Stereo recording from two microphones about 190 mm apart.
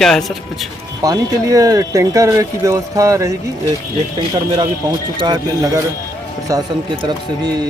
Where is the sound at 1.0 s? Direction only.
20° right (ahead or behind).